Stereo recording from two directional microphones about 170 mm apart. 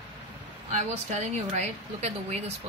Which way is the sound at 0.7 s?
45° right (ahead or behind).